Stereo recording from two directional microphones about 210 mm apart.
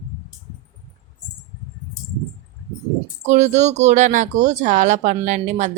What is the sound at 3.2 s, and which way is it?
Speech, 35° right (ahead or behind).